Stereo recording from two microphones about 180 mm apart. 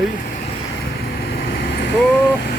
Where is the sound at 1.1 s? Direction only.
60° left (ahead or behind).